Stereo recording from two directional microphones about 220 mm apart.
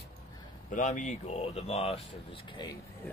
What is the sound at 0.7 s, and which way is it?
Speech, 35° left (ahead or behind).